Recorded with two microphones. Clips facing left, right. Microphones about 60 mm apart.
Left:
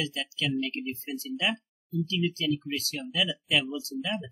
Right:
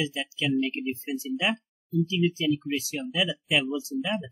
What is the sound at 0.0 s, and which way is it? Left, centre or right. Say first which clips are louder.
Speech: right 3 dB; centre.